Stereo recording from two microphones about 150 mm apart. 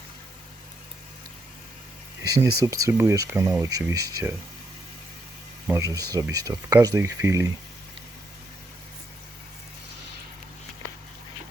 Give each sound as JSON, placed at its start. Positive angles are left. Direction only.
{"t": 2.2, "sound": "speech", "side_deg": -25}
{"t": 5.7, "sound": "speech", "side_deg": -25}